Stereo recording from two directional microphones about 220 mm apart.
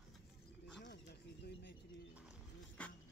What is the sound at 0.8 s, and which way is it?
Bird, 50° left (ahead or behind).